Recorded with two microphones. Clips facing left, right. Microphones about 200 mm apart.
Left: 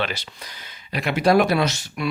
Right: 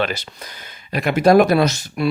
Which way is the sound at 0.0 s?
45° right (ahead or behind).